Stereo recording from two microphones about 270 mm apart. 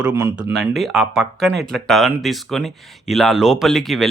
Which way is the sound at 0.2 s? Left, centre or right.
Centre.